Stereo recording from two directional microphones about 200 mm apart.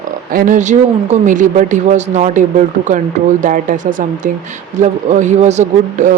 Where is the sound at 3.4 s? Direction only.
40° right (ahead or behind).